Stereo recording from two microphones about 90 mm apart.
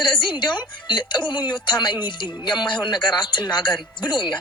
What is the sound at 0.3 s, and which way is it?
Speech, 60° left (ahead or behind).